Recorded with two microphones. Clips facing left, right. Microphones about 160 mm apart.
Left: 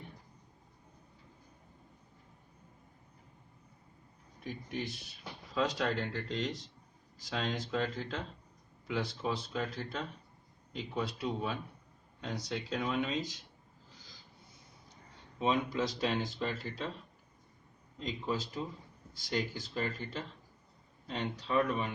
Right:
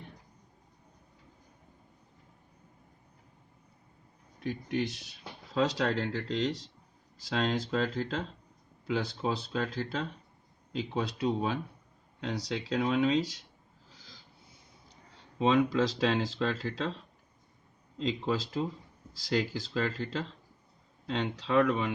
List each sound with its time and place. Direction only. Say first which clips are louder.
4.4 s speech: right 7 dB; 90° right
5.5 s speech: right 4 dB; 75° right (ahead or behind)
15.4 s speech: right 6 dB; 90° right